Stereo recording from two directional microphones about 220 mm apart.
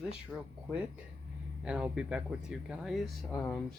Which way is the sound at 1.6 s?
5° right (ahead or behind).